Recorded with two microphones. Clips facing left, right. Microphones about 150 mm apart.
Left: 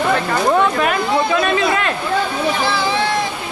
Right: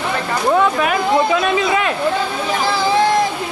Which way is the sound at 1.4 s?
10° right (ahead or behind).